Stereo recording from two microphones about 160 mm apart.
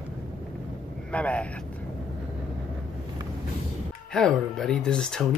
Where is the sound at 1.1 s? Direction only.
10° left (ahead or behind).